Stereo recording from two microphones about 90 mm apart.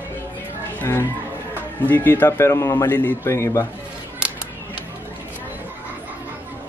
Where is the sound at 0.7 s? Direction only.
25° left (ahead or behind).